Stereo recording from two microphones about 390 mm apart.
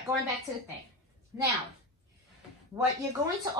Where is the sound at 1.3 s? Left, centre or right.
Centre.